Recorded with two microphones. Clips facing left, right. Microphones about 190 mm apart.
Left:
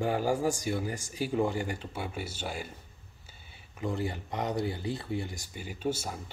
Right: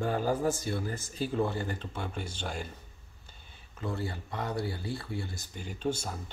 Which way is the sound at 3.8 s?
20° left (ahead or behind).